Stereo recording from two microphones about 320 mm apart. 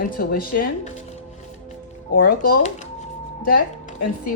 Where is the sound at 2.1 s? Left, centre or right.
Left.